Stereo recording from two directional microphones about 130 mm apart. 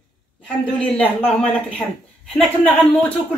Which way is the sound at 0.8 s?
10° left (ahead or behind).